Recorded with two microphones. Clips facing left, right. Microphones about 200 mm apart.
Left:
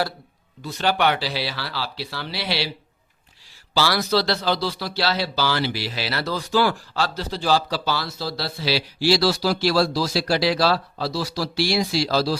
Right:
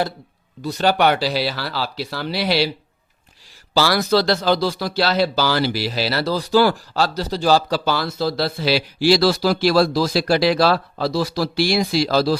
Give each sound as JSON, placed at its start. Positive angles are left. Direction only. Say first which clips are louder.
{"t": 0.6, "sound": "speech", "louder": "right 4 dB", "side_deg": -40}
{"t": 3.8, "sound": "speech", "louder": "right 4 dB", "side_deg": -45}